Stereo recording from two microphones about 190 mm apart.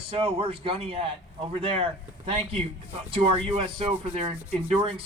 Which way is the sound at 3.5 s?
30° right (ahead or behind).